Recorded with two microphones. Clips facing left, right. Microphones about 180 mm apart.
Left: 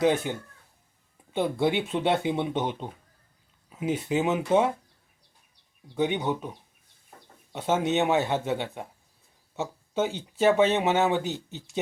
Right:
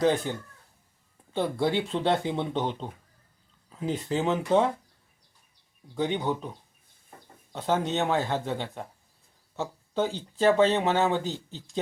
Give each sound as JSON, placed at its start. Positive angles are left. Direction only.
{"t": 0.0, "sound": "speech", "side_deg": 15}
{"t": 3.7, "sound": "a sound", "side_deg": 15}
{"t": 4.1, "sound": "speech", "side_deg": 15}
{"t": 6.0, "sound": "speech", "side_deg": 15}